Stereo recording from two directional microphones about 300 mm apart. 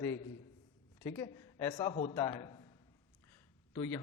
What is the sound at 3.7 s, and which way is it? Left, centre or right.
Speech, centre.